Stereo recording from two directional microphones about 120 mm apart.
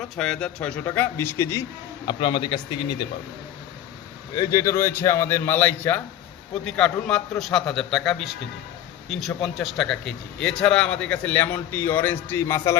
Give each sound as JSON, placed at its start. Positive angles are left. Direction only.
{"t": 0.0, "sound": "a man's voice", "side_deg": 5}
{"t": 2.0, "sound": "a man's voice", "side_deg": 40}
{"t": 4.4, "sound": "a man's voice", "side_deg": 25}